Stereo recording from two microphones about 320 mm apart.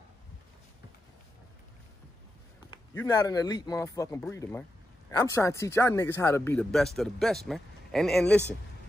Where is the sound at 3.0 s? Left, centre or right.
Centre.